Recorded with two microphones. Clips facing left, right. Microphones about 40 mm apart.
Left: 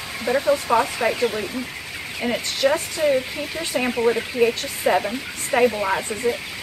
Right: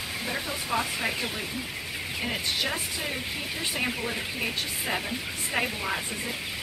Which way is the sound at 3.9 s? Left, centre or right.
Left.